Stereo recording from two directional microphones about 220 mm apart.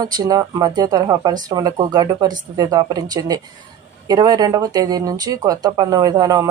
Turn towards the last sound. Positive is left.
turn(degrees=-15)  # may be behind; listen again after turning